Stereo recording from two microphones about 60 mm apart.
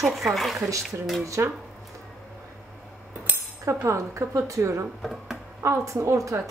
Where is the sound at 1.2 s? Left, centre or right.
Right.